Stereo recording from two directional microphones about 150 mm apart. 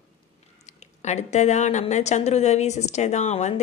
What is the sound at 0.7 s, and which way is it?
Speech, 50° left (ahead or behind).